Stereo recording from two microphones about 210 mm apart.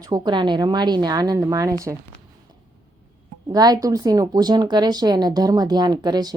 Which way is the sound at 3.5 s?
20° right (ahead or behind).